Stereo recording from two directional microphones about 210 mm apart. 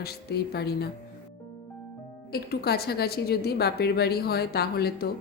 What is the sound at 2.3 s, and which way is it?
A woman's voice, 50° left (ahead or behind).